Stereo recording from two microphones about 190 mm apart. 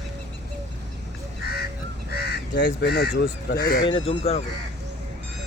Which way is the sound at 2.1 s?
55° left (ahead or behind).